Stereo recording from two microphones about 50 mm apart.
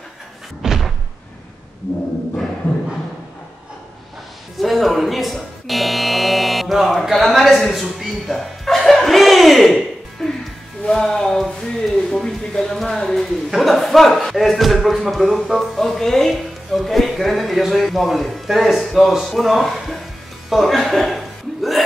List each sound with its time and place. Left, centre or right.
0.6 s slam: centre
4.6 s music: centre
8.0 s chuckle: centre
10.9 s speech: centre